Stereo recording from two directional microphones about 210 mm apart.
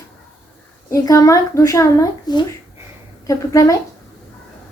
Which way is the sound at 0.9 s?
15° left (ahead or behind).